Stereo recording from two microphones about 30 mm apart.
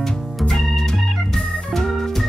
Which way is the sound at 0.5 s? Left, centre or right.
Centre.